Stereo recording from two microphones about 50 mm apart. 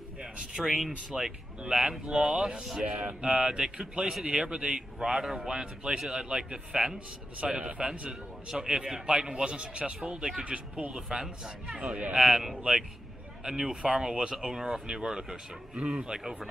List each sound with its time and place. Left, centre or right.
0.6 s a man's voice: centre; by 3.2 s right
3.2 s a man's voice: centre